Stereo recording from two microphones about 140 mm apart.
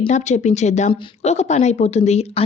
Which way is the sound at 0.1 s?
55° left (ahead or behind).